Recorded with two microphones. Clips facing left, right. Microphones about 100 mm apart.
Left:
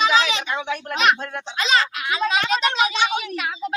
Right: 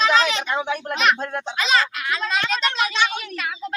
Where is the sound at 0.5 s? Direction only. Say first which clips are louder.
Right 2 dB; 30° right (ahead or behind).